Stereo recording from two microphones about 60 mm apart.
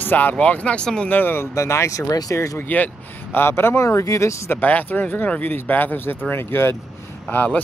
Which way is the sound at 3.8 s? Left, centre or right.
Left.